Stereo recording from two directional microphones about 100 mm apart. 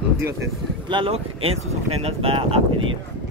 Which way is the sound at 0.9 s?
65° right (ahead or behind).